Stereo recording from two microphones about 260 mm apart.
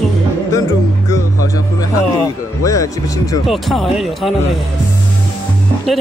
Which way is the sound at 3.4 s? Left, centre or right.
Centre.